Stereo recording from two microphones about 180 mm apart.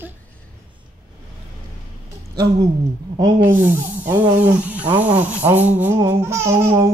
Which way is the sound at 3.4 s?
10° right (ahead or behind).